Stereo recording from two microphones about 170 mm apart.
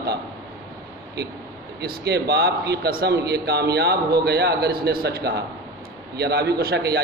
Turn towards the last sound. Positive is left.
turn(degrees=-70)  # may be behind; listen again after turning